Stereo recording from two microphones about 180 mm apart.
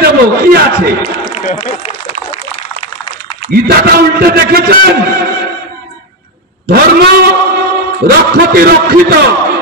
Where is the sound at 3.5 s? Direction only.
60° right (ahead or behind).